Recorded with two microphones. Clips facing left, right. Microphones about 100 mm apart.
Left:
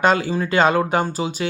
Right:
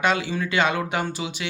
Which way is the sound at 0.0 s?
40° left (ahead or behind).